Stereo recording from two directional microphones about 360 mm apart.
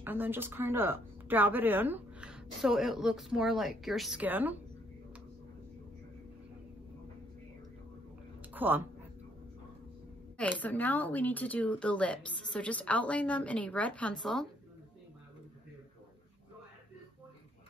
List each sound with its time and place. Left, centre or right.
0.0 s speech: centre
8.5 s speech: centre
10.3 s speech: centre